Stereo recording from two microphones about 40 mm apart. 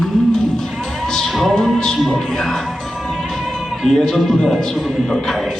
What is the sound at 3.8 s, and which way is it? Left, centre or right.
A man's voice, centre.